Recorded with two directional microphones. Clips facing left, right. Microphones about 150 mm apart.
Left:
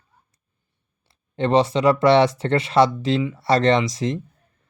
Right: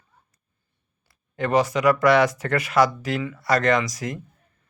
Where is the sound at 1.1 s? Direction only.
25° left (ahead or behind).